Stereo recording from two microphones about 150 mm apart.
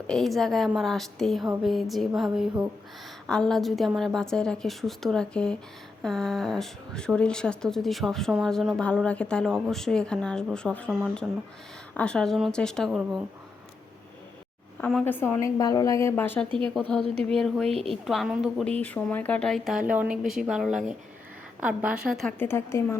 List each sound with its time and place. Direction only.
0.1 s speech: centre (ahead or behind)
14.8 s a woman's voice: 10° left (ahead or behind)
16.5 s a woman's voice: 35° right (ahead or behind)
17.2 s speech: 5° left (ahead or behind)
18.6 s a woman's voice: 10° left (ahead or behind)
19.8 s a woman's voice: 10° right (ahead or behind)
22.4 s a woman's voice: 15° left (ahead or behind)